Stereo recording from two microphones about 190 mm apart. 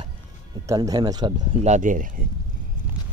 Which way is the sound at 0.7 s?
20° right (ahead or behind).